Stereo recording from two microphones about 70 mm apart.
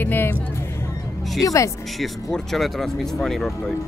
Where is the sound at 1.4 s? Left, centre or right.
Left.